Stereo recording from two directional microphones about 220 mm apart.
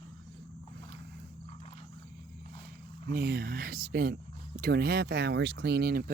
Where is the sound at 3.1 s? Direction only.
45° right (ahead or behind).